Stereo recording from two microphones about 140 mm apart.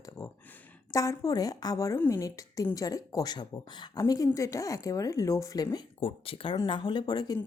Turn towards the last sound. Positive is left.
turn(degrees=30)  # may be behind; listen again after turning